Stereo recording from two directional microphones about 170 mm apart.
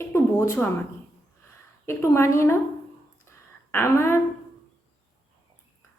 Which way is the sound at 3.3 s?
15° left (ahead or behind).